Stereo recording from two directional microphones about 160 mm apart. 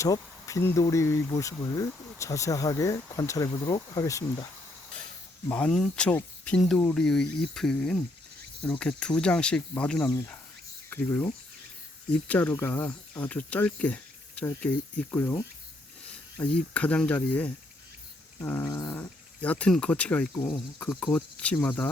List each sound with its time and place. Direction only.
0.0 s speech: 20° left (ahead or behind)
5.5 s speech: 5° left (ahead or behind)
12.3 s speech: 10° left (ahead or behind)
16.4 s speech: 10° left (ahead or behind)
19.4 s speech: 10° left (ahead or behind)